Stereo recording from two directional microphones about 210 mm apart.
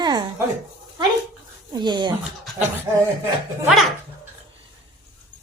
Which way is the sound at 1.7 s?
20° right (ahead or behind).